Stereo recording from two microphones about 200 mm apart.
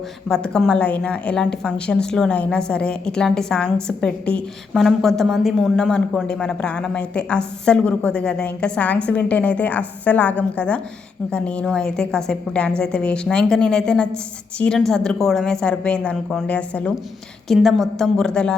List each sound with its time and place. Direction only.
0.3 s a woman's voice: 5° left (ahead or behind)